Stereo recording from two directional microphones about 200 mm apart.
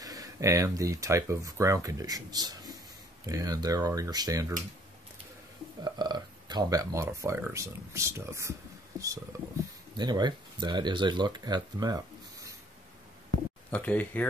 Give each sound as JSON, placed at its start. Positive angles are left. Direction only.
{"t": 0.0, "sound": "speech", "side_deg": -15}
{"t": 5.9, "sound": "speech", "side_deg": -20}
{"t": 13.7, "sound": "speech", "side_deg": 10}